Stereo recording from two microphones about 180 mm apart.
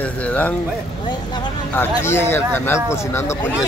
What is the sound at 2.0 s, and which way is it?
Speech, 15° left (ahead or behind).